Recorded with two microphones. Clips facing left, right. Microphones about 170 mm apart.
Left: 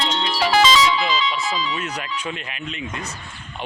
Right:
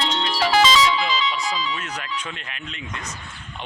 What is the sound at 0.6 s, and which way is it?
Speech, 55° left (ahead or behind).